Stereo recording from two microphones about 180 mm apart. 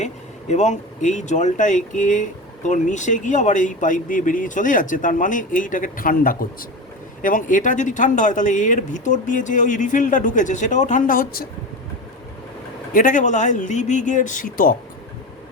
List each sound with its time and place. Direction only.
0.0 s speech: 40° left (ahead or behind)
12.9 s speech: 50° left (ahead or behind)